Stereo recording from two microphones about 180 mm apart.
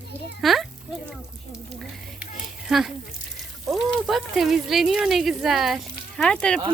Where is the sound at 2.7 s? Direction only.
Centre (ahead or behind).